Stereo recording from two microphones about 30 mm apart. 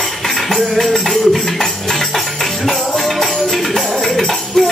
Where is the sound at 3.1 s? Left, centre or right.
Centre.